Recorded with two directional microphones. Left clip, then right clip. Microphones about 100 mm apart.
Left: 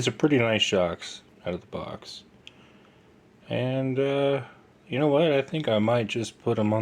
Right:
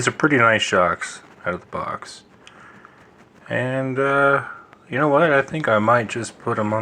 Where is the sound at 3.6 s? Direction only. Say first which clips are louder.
Right 5 dB; 15° left (ahead or behind).